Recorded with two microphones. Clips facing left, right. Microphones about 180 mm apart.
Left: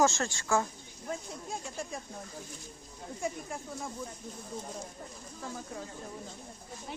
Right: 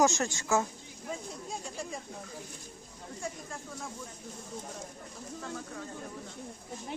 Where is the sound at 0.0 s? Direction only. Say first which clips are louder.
Right 1 dB; 20° right (ahead or behind).